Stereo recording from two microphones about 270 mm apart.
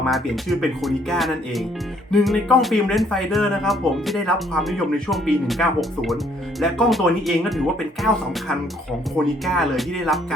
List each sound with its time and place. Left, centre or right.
0.1 s speech: centre
9.1 s speech: centre